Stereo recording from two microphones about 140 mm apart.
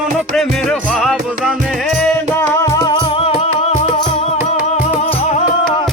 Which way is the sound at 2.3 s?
20° left (ahead or behind).